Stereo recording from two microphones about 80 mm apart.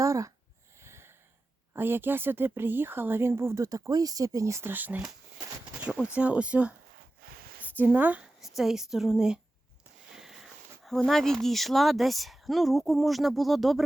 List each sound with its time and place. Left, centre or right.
0.0 s a sound: right
1.7 s speech: right
4.7 s speech: right
5.8 s a sound: centre
6.1 s speech: centre
7.8 s speech: right
8.4 s speech: centre
10.2 s a sound: centre
11.4 s speech: centre